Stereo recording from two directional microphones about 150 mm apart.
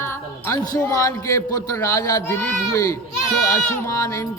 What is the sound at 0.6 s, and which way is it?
A man's voice, 25° left (ahead or behind).